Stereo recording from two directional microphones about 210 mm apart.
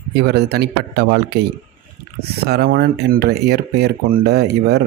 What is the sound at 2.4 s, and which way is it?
Speech, 50° right (ahead or behind).